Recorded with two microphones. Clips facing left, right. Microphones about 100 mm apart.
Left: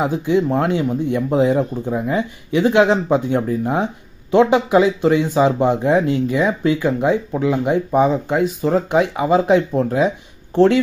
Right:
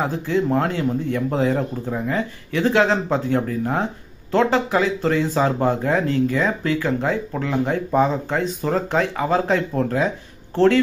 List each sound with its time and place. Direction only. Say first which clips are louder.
0.0 s speech: left 4 dB; 15° left (ahead or behind)